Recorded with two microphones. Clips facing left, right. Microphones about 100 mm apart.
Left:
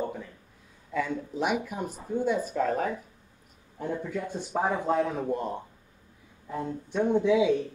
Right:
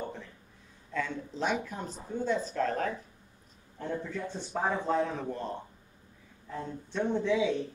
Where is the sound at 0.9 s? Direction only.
10° left (ahead or behind).